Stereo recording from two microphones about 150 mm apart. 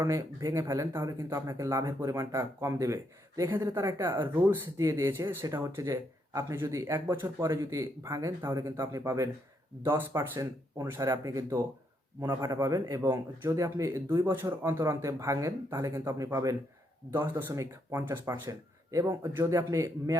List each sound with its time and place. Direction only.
0.0 s speech: 20° right (ahead or behind)